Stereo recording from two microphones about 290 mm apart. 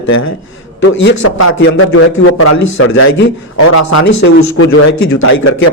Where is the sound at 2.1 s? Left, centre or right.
Left.